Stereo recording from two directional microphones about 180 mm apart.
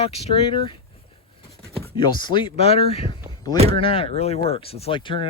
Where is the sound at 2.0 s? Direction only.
25° left (ahead or behind).